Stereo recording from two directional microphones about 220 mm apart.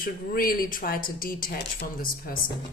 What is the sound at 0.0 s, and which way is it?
Speech, 40° left (ahead or behind).